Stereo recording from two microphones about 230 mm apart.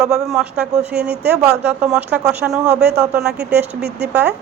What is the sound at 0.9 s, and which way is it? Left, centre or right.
Speech, right.